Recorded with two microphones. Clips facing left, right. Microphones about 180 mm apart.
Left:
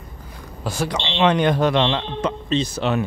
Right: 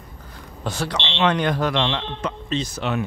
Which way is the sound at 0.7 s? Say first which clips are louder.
Left 2 dB; 10° left (ahead or behind).